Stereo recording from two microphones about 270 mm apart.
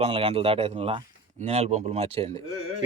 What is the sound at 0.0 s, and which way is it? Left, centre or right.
A man's voice, right.